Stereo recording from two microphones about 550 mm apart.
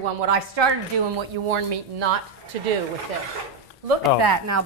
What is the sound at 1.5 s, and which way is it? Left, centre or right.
Speech, right.